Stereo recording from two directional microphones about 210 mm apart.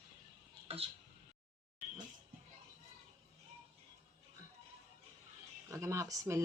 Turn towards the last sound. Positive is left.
turn(degrees=-15)  # may be behind; listen again after turning